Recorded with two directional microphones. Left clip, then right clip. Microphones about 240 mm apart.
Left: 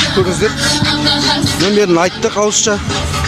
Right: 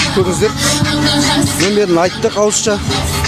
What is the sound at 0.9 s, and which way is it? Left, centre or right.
Speech, centre.